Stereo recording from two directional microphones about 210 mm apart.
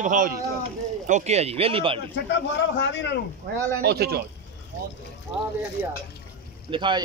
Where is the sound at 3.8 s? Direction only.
50° right (ahead or behind).